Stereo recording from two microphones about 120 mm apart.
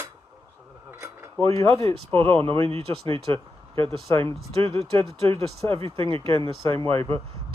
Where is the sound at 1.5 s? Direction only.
25° left (ahead or behind).